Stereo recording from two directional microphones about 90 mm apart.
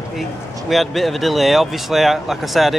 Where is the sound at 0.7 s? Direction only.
Centre (ahead or behind).